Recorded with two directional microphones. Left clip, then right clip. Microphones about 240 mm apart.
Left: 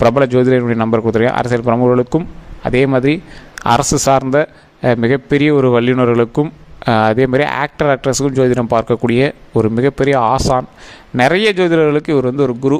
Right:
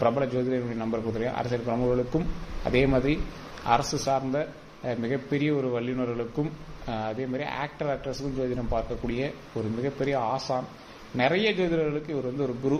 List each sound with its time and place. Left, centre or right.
0.0 s a man's voice: left